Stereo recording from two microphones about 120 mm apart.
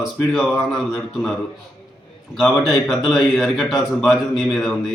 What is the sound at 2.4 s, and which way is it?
A man's voice, centre (ahead or behind).